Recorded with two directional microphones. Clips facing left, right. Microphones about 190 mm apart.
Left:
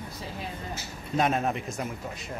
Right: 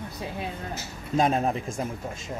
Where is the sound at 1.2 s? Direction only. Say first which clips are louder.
Right 2 dB; 35° right (ahead or behind).